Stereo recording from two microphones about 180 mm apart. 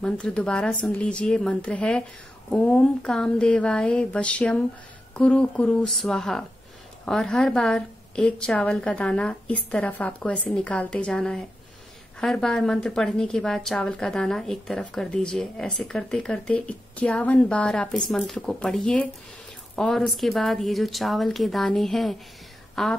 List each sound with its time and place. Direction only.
0.0 s a woman's voice: 5° left (ahead or behind)